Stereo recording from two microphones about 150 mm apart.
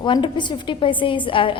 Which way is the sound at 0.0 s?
30° left (ahead or behind).